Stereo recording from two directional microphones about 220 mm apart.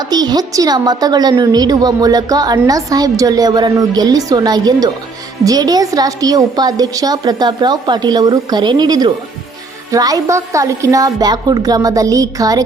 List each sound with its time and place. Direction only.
0.0 s a woman's voice: 20° right (ahead or behind)